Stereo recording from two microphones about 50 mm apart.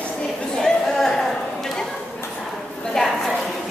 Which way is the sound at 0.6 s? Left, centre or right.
Centre.